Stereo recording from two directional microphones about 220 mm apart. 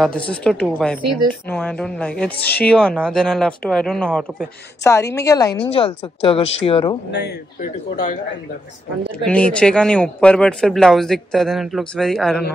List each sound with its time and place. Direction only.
0.3 s speech: 5° left (ahead or behind)
2.4 s speech: 45° left (ahead or behind)
2.7 s speech: 5° left (ahead or behind)
4.8 s speech: 15° left (ahead or behind)
7.1 s speech: 50° left (ahead or behind)
9.2 s speech: 5° left (ahead or behind)